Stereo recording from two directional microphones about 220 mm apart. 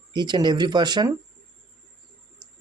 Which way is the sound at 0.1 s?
20° right (ahead or behind).